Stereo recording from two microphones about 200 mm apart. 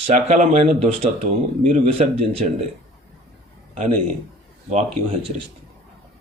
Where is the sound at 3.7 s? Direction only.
40° right (ahead or behind).